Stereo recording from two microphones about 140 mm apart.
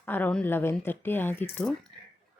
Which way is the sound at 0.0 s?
15° left (ahead or behind).